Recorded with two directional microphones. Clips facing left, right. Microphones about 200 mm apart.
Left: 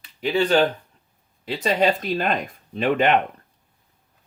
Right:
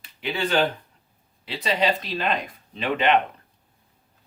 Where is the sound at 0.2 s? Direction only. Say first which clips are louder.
Left 5 dB; 40° left (ahead or behind).